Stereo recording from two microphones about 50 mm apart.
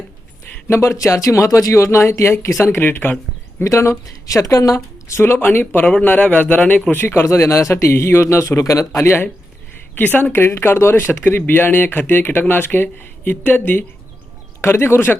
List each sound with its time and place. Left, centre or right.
0.7 s speech: left
2.0 s speech: left
2.6 s speech: left
3.6 s speech: left
5.2 s speech: left
5.8 s speech: left
6.9 s speech: left
9.9 s a woman's voice: left
10.3 s speech: left
14.6 s speech: left